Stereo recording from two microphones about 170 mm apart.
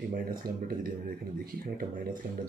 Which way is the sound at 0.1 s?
55° right (ahead or behind).